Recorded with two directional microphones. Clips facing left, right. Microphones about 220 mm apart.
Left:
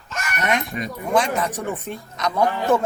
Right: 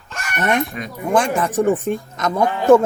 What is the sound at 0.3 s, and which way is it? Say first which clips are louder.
Speech: right 4 dB; 55° right (ahead or behind).